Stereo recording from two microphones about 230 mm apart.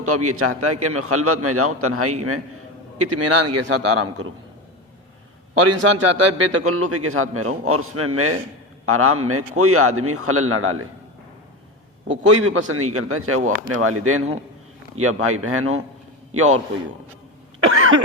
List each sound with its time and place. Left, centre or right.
0.0 s a man's voice: right
3.2 s a man's voice: right
5.5 s a man's voice: right
12.0 s a man's voice: right
17.7 s cough: right